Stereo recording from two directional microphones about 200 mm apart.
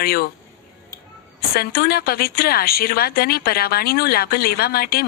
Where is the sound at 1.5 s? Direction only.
50° left (ahead or behind).